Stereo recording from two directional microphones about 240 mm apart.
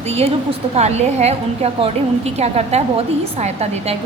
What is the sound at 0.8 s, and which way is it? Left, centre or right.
A woman's voice, right.